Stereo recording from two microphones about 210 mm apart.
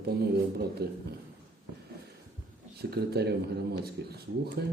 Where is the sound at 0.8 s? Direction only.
50° right (ahead or behind).